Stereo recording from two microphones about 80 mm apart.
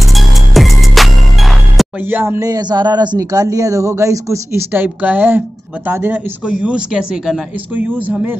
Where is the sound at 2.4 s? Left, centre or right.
Right.